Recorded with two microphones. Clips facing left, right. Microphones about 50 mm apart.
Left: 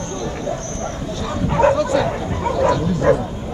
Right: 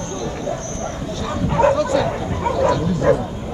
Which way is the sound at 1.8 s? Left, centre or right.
Centre.